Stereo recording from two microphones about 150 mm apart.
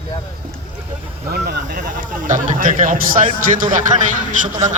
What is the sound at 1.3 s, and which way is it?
Speech, 90° right.